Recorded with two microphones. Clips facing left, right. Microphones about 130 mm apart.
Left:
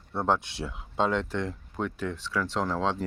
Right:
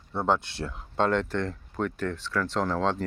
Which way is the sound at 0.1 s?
Centre (ahead or behind).